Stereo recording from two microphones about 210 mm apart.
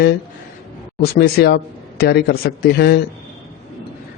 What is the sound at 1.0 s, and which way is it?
A man's voice, 45° left (ahead or behind).